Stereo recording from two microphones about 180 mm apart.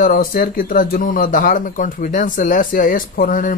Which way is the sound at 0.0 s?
50° left (ahead or behind).